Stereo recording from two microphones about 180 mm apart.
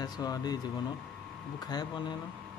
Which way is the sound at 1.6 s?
20° left (ahead or behind).